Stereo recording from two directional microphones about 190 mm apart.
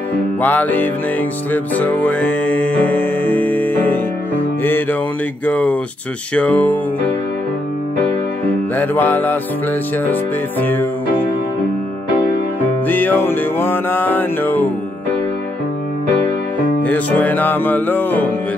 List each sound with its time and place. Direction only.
0.4 s music: 10° left (ahead or behind)
5.4 s music: 5° left (ahead or behind)
8.7 s music: 10° left (ahead or behind)
10.6 s music: 10° left (ahead or behind)
12.8 s music: 10° left (ahead or behind)
16.8 s music: 10° left (ahead or behind)